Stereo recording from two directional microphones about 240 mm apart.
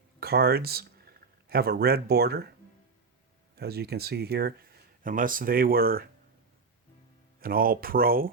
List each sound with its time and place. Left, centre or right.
0.2 s speech: right
3.5 s speech: right
7.4 s speech: right